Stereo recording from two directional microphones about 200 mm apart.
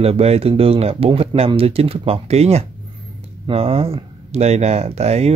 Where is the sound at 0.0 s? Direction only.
30° right (ahead or behind).